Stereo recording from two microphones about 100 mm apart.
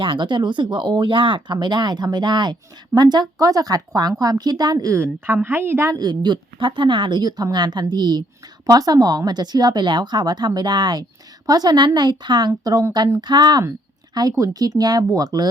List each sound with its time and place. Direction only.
0.0 s speech: 55° right (ahead or behind); by 4.9 s 40° right (ahead or behind)
4.9 s a woman's voice: 20° right (ahead or behind)
5.9 s speech: 45° right (ahead or behind)